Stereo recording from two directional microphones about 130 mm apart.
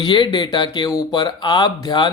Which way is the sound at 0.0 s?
35° left (ahead or behind).